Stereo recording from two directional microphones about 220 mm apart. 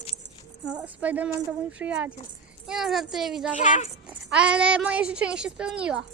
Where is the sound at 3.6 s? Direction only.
35° left (ahead or behind).